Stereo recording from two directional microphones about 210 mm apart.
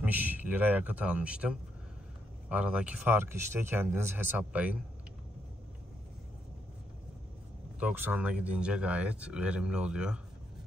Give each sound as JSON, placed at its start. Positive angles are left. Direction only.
{"t": 0.0, "sound": "speech", "side_deg": -10}
{"t": 7.8, "sound": "speech", "side_deg": -10}